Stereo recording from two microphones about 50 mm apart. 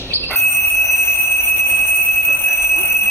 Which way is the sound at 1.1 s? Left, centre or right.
Left.